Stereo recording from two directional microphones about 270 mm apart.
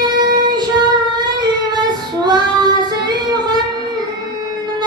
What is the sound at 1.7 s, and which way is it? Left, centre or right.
Female singing, centre.